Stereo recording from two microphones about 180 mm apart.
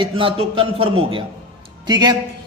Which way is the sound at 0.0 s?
30° right (ahead or behind).